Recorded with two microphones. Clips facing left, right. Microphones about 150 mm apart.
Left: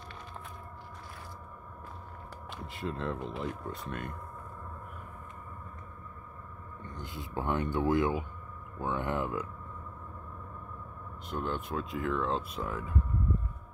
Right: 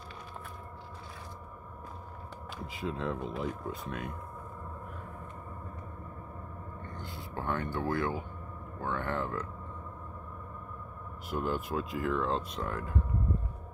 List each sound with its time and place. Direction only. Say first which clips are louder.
2.6 s speech: right 1 dB; centre (ahead or behind)
6.8 s a sound: left 3 dB; 20° left (ahead or behind)
8.7 s speech: left 1 dB; 15° left (ahead or behind)
11.2 s speech: right 2 dB; 5° right (ahead or behind)